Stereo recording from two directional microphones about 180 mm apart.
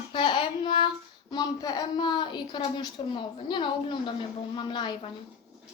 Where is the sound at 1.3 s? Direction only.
20° left (ahead or behind).